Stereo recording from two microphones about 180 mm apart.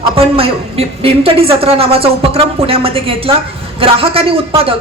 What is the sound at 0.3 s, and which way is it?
Speech, 30° right (ahead or behind).